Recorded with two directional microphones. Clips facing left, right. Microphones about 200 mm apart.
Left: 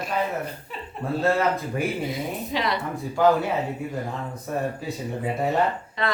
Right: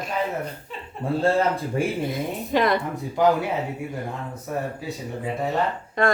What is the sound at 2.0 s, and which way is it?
Chuckle, 50° right (ahead or behind).